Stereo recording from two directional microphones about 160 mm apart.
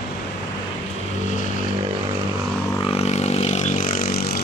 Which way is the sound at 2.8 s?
40° left (ahead or behind).